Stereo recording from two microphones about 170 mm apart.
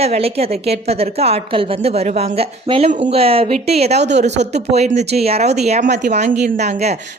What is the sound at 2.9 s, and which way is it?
A woman's voice, 45° right (ahead or behind).